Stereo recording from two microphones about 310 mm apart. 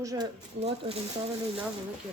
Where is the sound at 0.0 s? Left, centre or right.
Centre.